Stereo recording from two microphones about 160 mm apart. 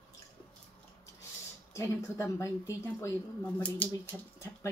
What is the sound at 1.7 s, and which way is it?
A woman's voice, 20° left (ahead or behind).